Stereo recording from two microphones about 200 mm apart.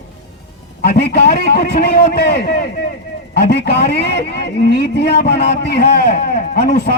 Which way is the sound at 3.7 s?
55° left (ahead or behind).